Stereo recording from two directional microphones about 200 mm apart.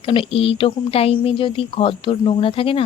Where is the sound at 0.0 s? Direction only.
25° left (ahead or behind).